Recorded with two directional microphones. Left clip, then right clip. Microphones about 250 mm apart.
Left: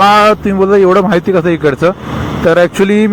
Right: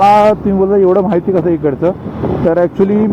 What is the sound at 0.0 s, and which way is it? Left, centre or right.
Speech, left.